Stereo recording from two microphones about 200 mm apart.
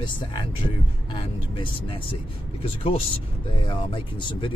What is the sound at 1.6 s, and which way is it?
A man's voice, 25° left (ahead or behind).